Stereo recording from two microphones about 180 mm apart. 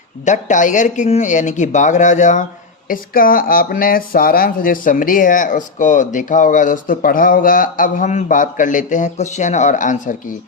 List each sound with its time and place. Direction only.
0.3 s speech: 45° left (ahead or behind)